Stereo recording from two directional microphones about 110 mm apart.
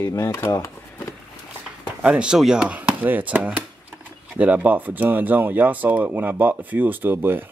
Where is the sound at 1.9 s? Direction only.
10° right (ahead or behind).